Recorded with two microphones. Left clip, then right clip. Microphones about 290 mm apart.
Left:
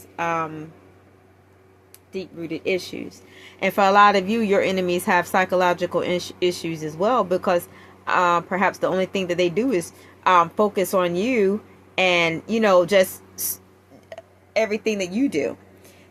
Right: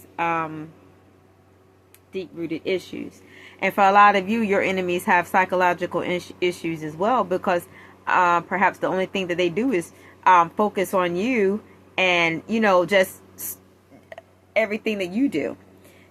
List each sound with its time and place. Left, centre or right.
0.2 s speech: centre
2.1 s speech: left
14.1 s speech: centre